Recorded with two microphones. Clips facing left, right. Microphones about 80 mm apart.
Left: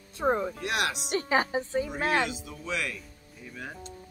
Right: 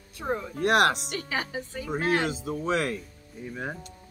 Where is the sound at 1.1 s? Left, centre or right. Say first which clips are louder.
Left 5 dB; left.